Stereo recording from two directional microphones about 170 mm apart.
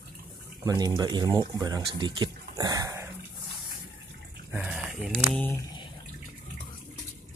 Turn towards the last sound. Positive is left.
turn(degrees=10)  # may be behind; listen again after turning